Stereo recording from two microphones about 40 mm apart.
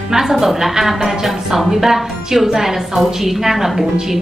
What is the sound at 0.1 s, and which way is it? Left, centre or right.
A woman's voice, centre.